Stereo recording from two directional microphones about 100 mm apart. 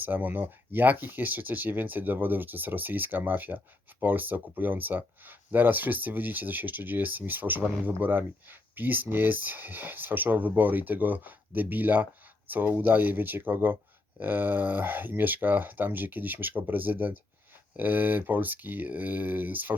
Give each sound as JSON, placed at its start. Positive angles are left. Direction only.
{"t": 0.0, "sound": "speech", "side_deg": -20}